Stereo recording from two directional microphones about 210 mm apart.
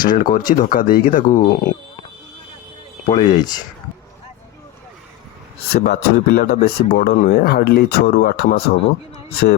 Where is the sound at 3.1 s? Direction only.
20° left (ahead or behind).